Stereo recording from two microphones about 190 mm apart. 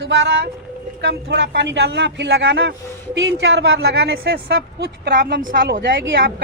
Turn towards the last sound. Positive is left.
turn(degrees=-60)  # may be behind; listen again after turning